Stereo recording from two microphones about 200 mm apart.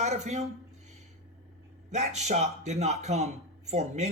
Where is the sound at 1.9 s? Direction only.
35° right (ahead or behind).